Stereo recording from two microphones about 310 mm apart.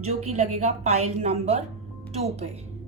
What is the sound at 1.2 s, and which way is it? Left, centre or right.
A woman's voice, centre.